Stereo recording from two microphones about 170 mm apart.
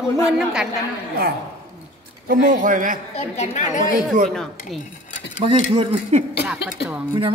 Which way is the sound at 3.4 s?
45° left (ahead or behind).